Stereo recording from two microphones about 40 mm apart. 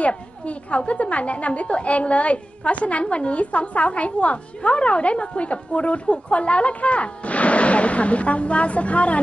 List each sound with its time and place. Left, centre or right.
0.0 s a woman's voice: left